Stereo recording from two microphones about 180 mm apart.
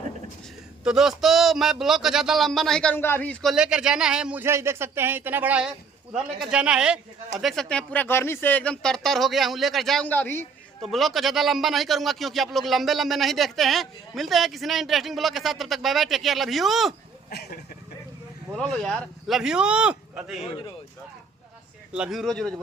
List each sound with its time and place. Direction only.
0.9 s a man's voice: centre (ahead or behind)
3.5 s a man's voice: 5° right (ahead or behind)
10.8 s a man's voice: centre (ahead or behind)
17.2 s speech: 60° left (ahead or behind)
18.5 s a man's voice: 5° left (ahead or behind)
21.9 s a man's voice: 5° right (ahead or behind)